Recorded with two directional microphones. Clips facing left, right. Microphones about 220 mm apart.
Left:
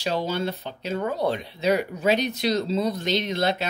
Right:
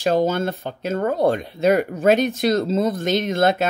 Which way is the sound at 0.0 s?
50° right (ahead or behind).